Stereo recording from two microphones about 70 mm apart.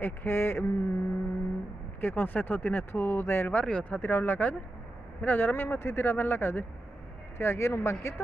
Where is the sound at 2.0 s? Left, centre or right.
Left.